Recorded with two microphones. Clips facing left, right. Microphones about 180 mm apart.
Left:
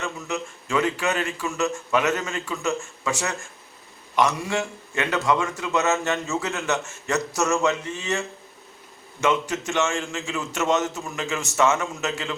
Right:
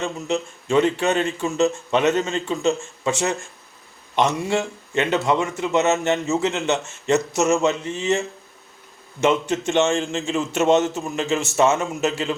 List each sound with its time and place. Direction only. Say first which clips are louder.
0.0 s a man's voice: right 5 dB; 30° right (ahead or behind)
9.2 s a man's voice: right 4 dB; 30° right (ahead or behind)